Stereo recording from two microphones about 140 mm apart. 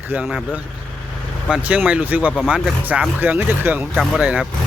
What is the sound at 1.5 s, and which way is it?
Speech, 10° right (ahead or behind).